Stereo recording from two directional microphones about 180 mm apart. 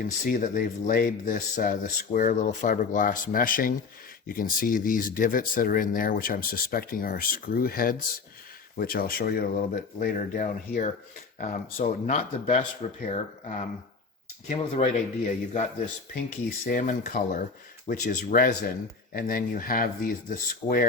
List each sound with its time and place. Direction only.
0.0 s speech: 50° left (ahead or behind)
16.6 s speech: 45° left (ahead or behind)